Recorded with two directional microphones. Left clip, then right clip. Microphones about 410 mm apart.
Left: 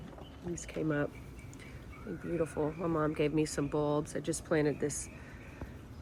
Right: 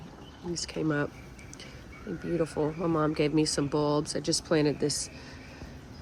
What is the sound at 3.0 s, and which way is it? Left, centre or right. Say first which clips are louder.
Speech: right 4 dB; centre.